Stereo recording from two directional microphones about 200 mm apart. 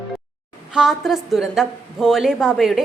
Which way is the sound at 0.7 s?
Centre (ahead or behind).